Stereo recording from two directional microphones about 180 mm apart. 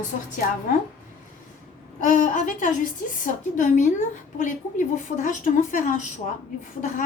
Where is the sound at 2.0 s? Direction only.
45° left (ahead or behind).